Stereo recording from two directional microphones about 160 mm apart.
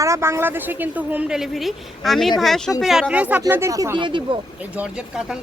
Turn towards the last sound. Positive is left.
turn(degrees=-5)  # may be behind; listen again after turning